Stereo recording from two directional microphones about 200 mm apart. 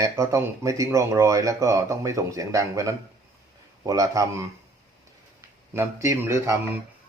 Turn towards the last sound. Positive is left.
turn(degrees=-15)  # may be behind; listen again after turning